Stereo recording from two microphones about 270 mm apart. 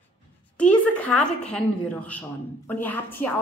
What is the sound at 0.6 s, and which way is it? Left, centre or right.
A woman's voice, centre.